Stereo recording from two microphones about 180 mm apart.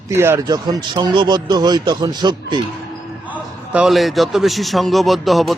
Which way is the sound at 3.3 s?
10° right (ahead or behind).